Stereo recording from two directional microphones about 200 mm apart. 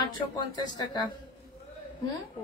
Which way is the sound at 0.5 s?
20° left (ahead or behind).